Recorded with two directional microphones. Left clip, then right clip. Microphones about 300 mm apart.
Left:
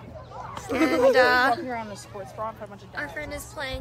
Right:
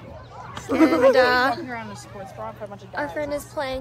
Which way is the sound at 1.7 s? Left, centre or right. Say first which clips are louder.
Left 1 dB; left.